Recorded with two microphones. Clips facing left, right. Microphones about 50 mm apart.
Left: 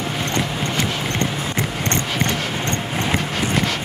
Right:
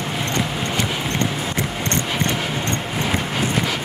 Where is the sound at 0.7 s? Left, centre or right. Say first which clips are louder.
Even; centre.